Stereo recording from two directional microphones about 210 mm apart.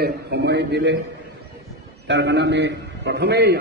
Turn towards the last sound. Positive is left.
turn(degrees=-50)  # may be behind; listen again after turning